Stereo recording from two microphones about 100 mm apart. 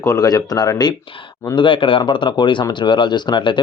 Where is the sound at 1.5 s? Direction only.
55° left (ahead or behind).